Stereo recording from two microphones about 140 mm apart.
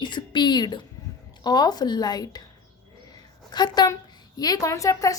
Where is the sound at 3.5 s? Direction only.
30° left (ahead or behind).